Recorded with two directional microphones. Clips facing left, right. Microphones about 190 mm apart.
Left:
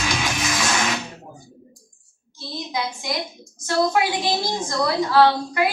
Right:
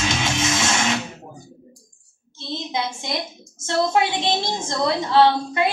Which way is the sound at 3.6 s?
25° right (ahead or behind).